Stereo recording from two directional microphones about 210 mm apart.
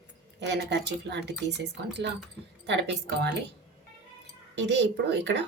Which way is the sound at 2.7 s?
55° right (ahead or behind).